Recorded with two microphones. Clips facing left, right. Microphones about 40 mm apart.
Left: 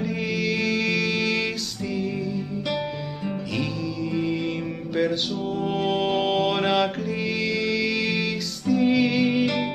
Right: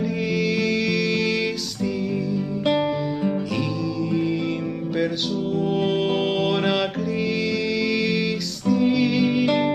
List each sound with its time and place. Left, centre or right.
0.4 s music: centre
4.1 s music: centre
5.6 s music: centre